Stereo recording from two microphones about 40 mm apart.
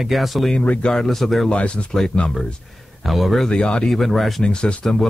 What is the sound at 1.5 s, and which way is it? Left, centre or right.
Speech, left.